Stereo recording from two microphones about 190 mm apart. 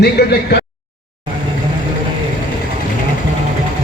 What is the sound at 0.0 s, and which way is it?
Speech, 55° left (ahead or behind).